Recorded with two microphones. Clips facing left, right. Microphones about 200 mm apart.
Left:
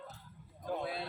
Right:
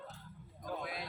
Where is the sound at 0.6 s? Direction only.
30° left (ahead or behind).